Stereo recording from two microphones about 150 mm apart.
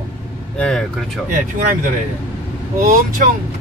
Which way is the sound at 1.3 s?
65° right (ahead or behind).